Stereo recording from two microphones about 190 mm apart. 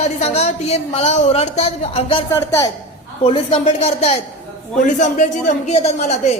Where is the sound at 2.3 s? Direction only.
15° left (ahead or behind).